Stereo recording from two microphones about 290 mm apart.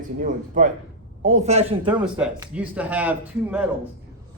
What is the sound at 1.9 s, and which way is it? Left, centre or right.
A man's voice, centre.